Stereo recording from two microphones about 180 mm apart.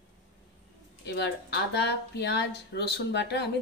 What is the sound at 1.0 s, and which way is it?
Speech, 70° left (ahead or behind).